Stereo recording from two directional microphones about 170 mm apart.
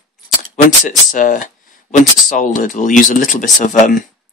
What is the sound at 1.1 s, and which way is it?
Speech, 50° left (ahead or behind).